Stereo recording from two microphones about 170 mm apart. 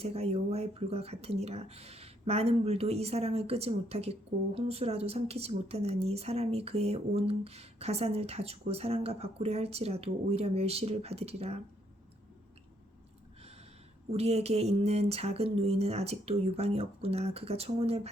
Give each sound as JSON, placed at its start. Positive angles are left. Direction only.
{"t": 0.0, "sound": "speech", "side_deg": -35}
{"t": 14.1, "sound": "speech", "side_deg": -35}